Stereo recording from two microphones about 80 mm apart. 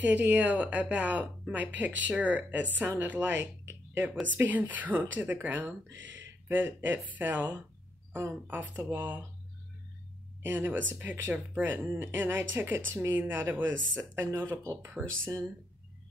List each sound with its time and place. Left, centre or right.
0.0 s speech: right
4.0 s speech: right
10.4 s speech: right
11.8 s speech: right
15.0 s speech: centre